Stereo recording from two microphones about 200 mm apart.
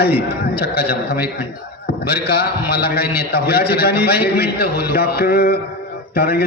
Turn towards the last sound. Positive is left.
turn(degrees=50)  # may be behind; listen again after turning